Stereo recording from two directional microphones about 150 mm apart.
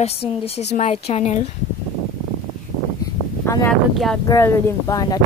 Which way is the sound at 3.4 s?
20° left (ahead or behind).